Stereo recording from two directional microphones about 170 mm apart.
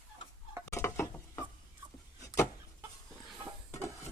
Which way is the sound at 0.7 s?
15° left (ahead or behind).